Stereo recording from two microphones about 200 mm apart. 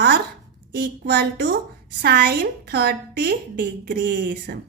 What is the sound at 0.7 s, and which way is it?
A woman's voice, 55° right (ahead or behind).